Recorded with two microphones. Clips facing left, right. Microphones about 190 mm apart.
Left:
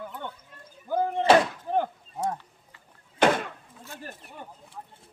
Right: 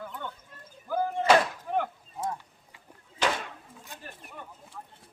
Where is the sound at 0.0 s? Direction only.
20° left (ahead or behind).